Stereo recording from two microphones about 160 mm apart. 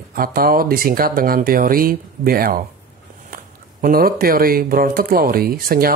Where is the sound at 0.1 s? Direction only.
65° right (ahead or behind).